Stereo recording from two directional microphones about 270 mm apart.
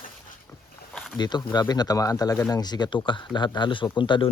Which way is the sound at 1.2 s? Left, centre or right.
Centre.